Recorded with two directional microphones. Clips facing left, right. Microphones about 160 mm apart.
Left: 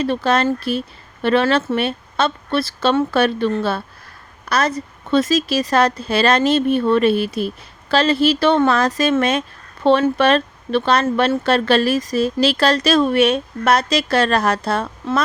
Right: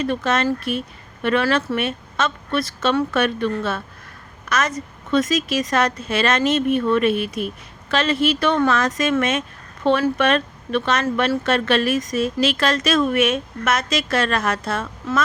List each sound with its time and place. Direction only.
0.0 s speech: 35° left (ahead or behind)